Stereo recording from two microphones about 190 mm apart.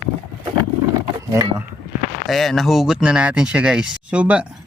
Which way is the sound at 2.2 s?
Centre (ahead or behind).